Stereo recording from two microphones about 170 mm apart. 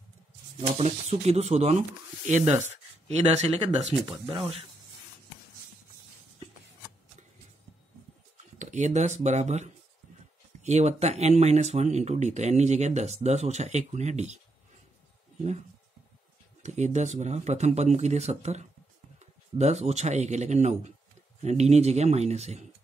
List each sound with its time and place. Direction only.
0.6 s speech: 40° right (ahead or behind)
8.5 s speech: 45° right (ahead or behind)
16.6 s a man's voice: 45° right (ahead or behind)